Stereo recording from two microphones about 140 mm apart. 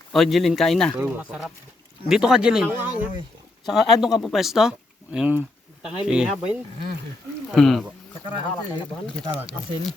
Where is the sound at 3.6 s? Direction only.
Centre (ahead or behind).